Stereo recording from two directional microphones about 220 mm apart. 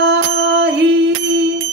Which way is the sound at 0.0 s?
50° right (ahead or behind).